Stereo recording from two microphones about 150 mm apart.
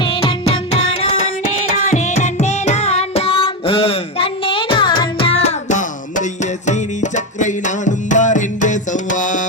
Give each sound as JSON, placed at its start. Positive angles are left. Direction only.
{"t": 0.0, "sound": "music", "side_deg": 35}
{"t": 1.9, "sound": "carnatic music", "side_deg": 55}